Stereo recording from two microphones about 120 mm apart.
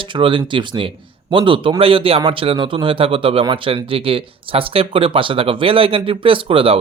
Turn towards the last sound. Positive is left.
turn(degrees=-50)  # may be behind; listen again after turning